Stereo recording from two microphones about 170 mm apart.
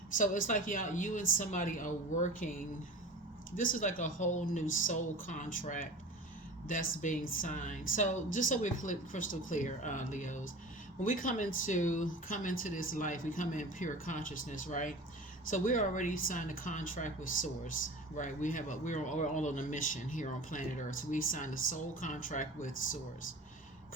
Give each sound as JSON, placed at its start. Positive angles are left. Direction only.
{"t": 0.2, "sound": "speech", "side_deg": 50}